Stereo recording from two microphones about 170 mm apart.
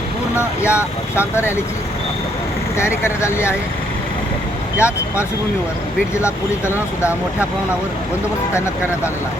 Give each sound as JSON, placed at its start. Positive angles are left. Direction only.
{"t": 0.3, "sound": "speech", "side_deg": 15}
{"t": 2.7, "sound": "speech", "side_deg": 15}
{"t": 4.8, "sound": "speech", "side_deg": 15}
{"t": 6.2, "sound": "speech", "side_deg": 15}